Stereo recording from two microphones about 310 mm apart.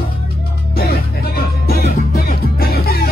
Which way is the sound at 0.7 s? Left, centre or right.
Left.